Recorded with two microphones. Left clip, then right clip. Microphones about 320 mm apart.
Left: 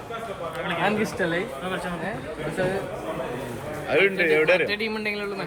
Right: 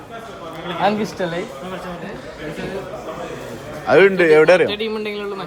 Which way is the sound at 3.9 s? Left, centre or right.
Right.